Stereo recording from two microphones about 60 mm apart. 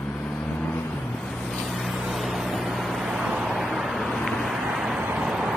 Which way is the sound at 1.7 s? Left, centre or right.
Centre.